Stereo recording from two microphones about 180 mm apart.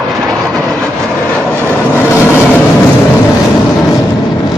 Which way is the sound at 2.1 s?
15° left (ahead or behind).